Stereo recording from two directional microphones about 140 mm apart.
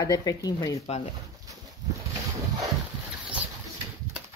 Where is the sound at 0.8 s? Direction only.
45° left (ahead or behind).